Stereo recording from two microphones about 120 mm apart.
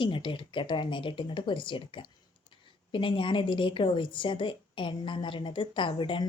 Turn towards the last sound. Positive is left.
turn(degrees=45)  # may be behind; listen again after turning